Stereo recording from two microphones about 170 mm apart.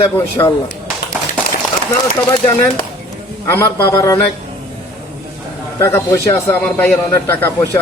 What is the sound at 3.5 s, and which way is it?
Speech, 15° left (ahead or behind).